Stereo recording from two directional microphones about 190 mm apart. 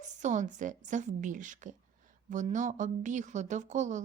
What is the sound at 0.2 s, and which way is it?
A woman's voice, 40° right (ahead or behind).